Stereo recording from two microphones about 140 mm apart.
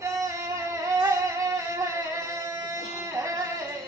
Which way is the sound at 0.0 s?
20° right (ahead or behind).